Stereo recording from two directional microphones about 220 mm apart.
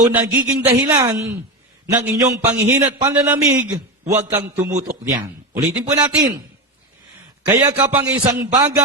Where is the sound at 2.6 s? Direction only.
15° right (ahead or behind).